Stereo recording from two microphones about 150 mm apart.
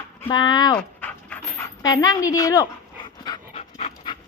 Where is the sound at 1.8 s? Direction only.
25° left (ahead or behind).